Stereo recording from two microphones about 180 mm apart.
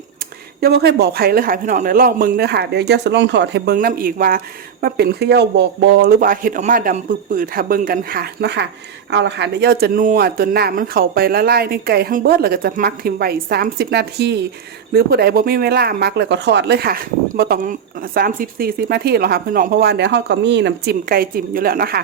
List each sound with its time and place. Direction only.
0.6 s speech: 65° right (ahead or behind)